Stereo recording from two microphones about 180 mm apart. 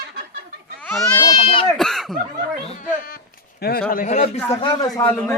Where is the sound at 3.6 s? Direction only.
60° left (ahead or behind).